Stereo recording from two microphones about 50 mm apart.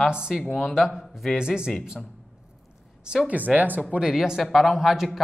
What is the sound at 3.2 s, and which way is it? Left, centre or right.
Speech, right.